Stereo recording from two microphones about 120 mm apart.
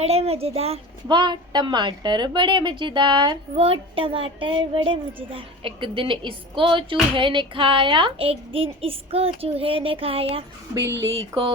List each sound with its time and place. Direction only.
0.0 s a child's voice: 60° right (ahead or behind)
1.0 s a woman's voice: 40° right (ahead or behind)
3.5 s speech: 55° right (ahead or behind)
10.8 s speech: 25° right (ahead or behind)